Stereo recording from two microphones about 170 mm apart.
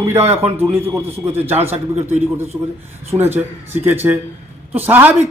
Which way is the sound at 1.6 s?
40° right (ahead or behind).